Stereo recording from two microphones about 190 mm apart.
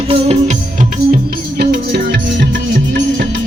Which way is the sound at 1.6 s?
55° right (ahead or behind).